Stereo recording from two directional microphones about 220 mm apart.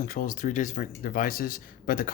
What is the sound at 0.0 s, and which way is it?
Speech, 40° left (ahead or behind).